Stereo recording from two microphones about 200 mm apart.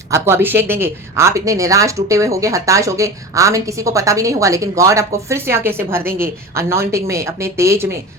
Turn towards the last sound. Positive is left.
turn(degrees=-15)  # may be behind; listen again after turning